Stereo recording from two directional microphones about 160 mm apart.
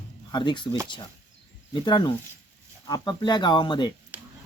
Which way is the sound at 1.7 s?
30° left (ahead or behind).